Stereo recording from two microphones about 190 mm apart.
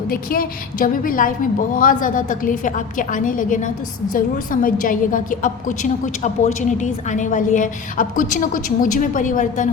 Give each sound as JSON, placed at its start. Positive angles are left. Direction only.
{"t": 0.1, "sound": "a woman's voice", "side_deg": 50}